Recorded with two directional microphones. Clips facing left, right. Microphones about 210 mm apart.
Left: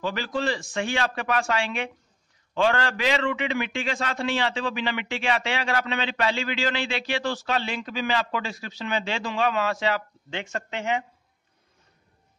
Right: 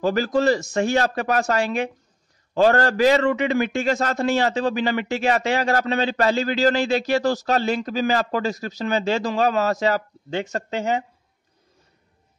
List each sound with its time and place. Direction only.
0.0 s a man's voice: 45° right (ahead or behind)